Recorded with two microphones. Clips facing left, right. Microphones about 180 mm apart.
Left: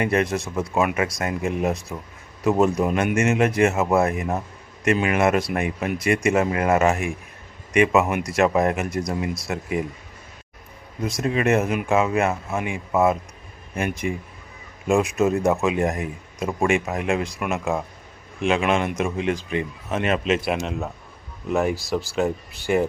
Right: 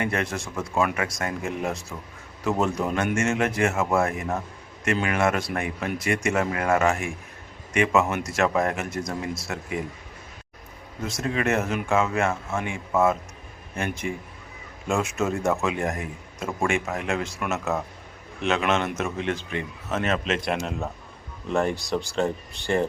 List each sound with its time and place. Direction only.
0.0 s a man's voice: 20° left (ahead or behind)
11.2 s a man's voice: 20° left (ahead or behind)